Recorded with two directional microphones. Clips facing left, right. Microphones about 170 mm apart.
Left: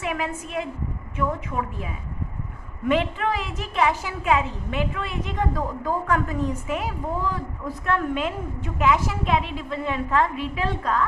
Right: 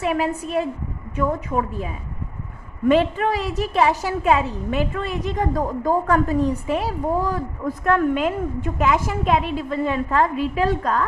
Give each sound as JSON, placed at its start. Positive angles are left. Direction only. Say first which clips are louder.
{"t": 0.0, "sound": "a woman's voice", "louder": "right 6 dB", "side_deg": -35}
{"t": 2.9, "sound": "a woman's voice", "louder": "right 4 dB", "side_deg": -40}
{"t": 7.9, "sound": "a woman's voice", "louder": "right 6 dB", "side_deg": -45}